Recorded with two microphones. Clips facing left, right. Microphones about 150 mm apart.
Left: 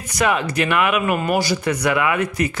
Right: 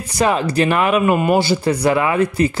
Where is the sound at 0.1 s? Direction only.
30° right (ahead or behind).